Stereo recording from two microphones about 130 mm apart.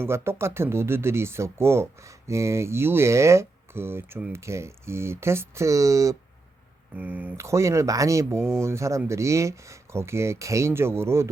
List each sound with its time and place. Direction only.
0.0 s speech: 20° right (ahead or behind)
6.9 s speech: 15° right (ahead or behind)